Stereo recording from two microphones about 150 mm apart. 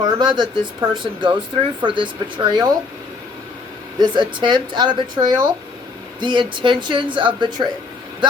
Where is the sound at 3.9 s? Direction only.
30° right (ahead or behind).